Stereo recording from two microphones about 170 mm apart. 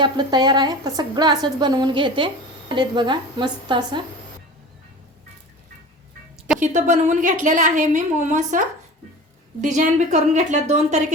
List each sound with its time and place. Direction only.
0.0 s a woman's voice: 25° right (ahead or behind)
6.6 s a woman's voice: 45° right (ahead or behind)